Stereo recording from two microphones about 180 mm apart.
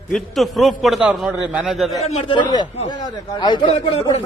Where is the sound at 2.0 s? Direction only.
35° left (ahead or behind).